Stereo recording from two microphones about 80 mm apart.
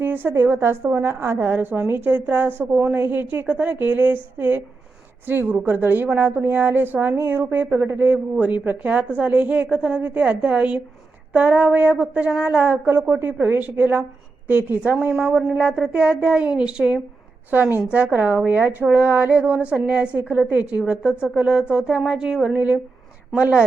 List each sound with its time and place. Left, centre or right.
0.0 s a woman's voice: right
15.1 s speech: centre
15.5 s a woman's voice: centre
17.5 s a woman's voice: right; by 22.5 s centre
22.5 s a woman's voice: right